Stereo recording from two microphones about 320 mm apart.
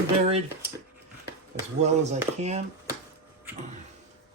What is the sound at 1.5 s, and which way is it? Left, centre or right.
Speech, right.